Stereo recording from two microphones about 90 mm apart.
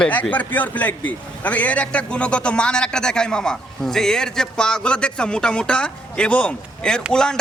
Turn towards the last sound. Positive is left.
turn(degrees=10)  # may be behind; listen again after turning